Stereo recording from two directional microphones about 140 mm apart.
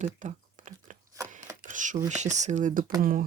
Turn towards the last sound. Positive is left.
turn(degrees=-90)